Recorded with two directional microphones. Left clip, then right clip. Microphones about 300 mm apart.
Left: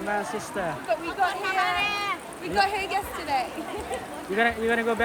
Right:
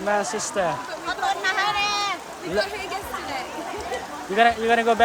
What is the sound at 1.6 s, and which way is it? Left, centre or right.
Speech, right.